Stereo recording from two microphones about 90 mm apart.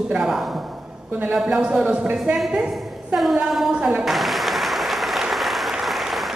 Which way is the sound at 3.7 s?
15° right (ahead or behind).